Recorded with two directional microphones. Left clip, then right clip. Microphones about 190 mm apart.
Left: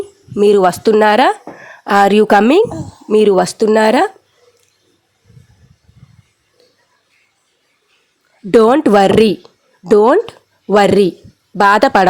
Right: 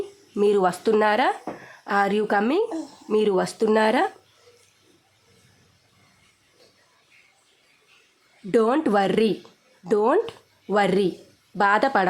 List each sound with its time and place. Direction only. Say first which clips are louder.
0.3 s speech: left 10 dB; 35° left (ahead or behind)
8.4 s speech: left 11 dB; 40° left (ahead or behind)